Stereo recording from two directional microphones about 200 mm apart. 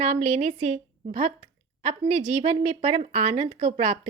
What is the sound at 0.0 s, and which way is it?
A woman's voice, 35° right (ahead or behind).